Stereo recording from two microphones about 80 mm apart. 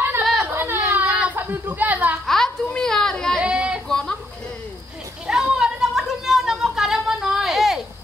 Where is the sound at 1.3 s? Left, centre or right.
Right.